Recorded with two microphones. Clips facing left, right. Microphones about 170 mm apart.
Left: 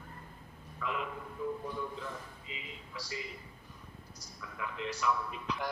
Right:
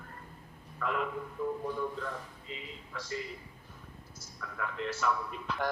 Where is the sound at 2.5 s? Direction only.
40° right (ahead or behind).